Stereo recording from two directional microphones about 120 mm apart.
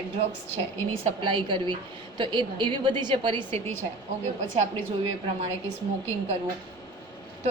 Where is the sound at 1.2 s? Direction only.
40° right (ahead or behind).